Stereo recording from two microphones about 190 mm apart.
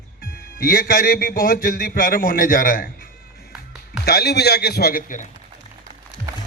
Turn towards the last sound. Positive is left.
turn(degrees=45)  # may be behind; listen again after turning